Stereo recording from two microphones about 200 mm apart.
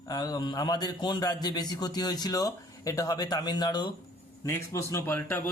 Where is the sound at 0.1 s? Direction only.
20° left (ahead or behind).